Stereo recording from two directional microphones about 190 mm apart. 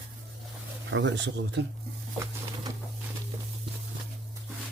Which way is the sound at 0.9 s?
75° right (ahead or behind).